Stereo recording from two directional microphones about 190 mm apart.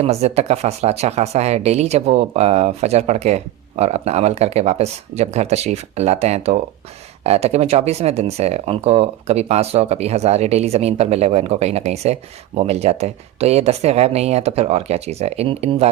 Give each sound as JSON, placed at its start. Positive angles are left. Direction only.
{"t": 0.0, "sound": "speech", "side_deg": -35}